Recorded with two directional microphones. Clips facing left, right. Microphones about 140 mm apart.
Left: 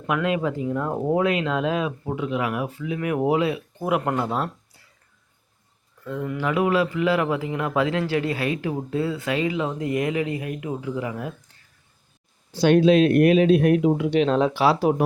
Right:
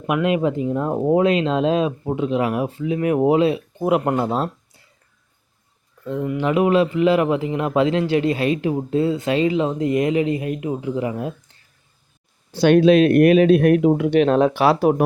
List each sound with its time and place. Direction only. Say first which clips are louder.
0.0 s speech: right 4 dB; 20° right (ahead or behind)
6.1 s speech: right 5 dB; 20° right (ahead or behind)
12.5 s speech: right 3 dB; 70° right (ahead or behind)